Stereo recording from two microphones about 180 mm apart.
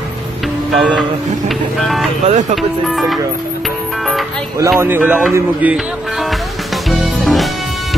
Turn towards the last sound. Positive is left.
turn(degrees=0)  # may be behind; listen again after turning